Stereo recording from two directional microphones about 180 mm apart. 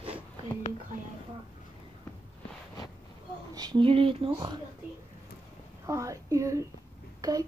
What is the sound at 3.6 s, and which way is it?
Speech, 25° right (ahead or behind).